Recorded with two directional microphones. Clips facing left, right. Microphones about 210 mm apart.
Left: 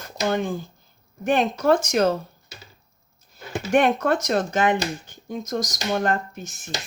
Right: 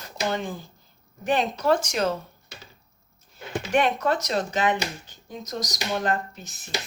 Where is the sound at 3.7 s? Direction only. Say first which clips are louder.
Left 4 dB; 50° left (ahead or behind).